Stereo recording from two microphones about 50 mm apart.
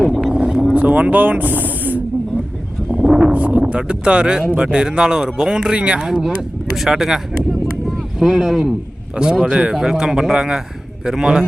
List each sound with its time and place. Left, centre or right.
0.0 s boat: centre
0.8 s music: right
2.9 s a sound: centre
3.3 s a sound: right
3.7 s speech: right
6.0 s speech: centre
8.2 s speech: centre
9.7 s speech: centre